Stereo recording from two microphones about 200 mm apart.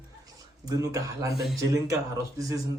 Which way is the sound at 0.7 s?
15° right (ahead or behind).